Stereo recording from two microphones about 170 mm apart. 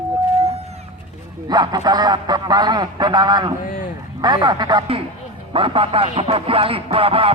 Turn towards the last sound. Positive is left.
turn(degrees=-30)  # may be behind; listen again after turning